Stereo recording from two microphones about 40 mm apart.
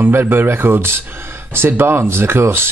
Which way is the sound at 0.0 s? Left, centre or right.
Right.